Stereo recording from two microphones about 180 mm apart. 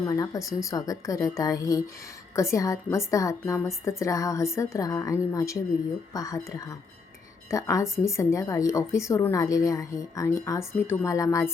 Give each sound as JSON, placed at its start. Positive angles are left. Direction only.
{"t": 0.0, "sound": "a woman's voice", "side_deg": 20}